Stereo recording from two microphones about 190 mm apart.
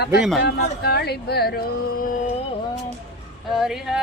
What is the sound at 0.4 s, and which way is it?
Speech, 60° left (ahead or behind).